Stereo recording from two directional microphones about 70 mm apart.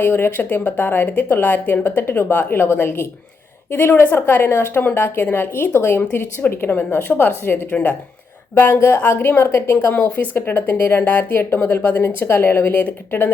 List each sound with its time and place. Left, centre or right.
0.0 s speech: left